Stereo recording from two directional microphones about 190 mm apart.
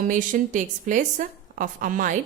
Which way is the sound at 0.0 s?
45° right (ahead or behind).